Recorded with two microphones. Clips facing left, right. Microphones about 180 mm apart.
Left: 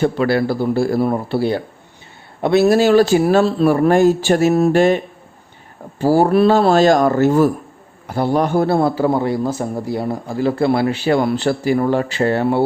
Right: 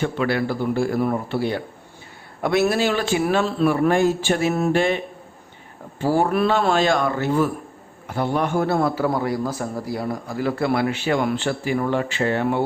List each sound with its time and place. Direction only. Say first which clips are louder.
0.0 s a man's voice: left 6 dB; 35° left (ahead or behind)
2.6 s a man's voice: left 9 dB; 40° left (ahead or behind)
6.0 s a man's voice: left 6 dB; 40° left (ahead or behind)